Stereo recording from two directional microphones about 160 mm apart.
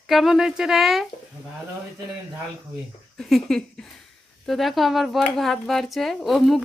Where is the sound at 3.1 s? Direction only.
Centre (ahead or behind).